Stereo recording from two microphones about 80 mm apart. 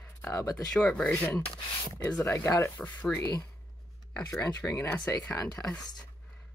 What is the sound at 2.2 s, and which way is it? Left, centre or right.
Speech, left.